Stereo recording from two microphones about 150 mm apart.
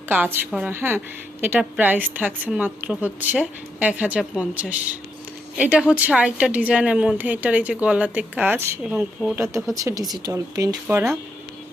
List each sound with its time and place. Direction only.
0.1 s a woman's voice: 10° right (ahead or behind)